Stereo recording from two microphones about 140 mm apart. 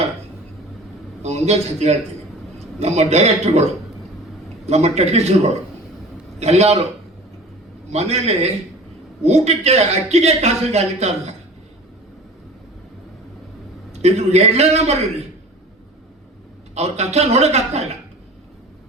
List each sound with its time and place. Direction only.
1.2 s a man's voice: 50° right (ahead or behind)
6.4 s a man's voice: 50° right (ahead or behind)
7.9 s a man's voice: 50° right (ahead or behind)
14.0 s a man's voice: 50° right (ahead or behind)
16.7 s a man's voice: 50° right (ahead or behind)